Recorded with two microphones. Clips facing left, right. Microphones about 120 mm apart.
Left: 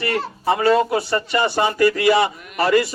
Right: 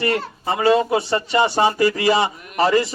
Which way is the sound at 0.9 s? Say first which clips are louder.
Right 1 dB; 20° right (ahead or behind).